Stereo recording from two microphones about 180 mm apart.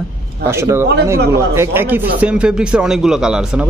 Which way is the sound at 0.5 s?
15° right (ahead or behind).